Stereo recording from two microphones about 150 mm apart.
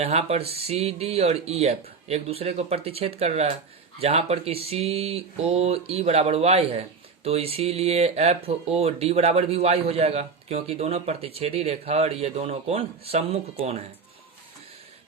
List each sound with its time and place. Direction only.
0.0 s speech: 45° right (ahead or behind)